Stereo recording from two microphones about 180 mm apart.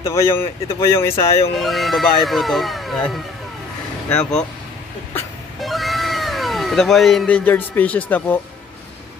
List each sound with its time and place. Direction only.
0.0 s speech: 15° left (ahead or behind)
1.5 s speech: centre (ahead or behind)
4.1 s speech: 5° left (ahead or behind)
5.6 s cat: centre (ahead or behind)